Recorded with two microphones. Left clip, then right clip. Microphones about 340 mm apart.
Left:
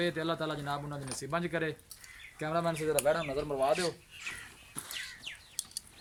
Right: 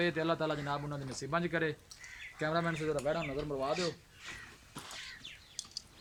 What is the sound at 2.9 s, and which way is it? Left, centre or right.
Speech, left.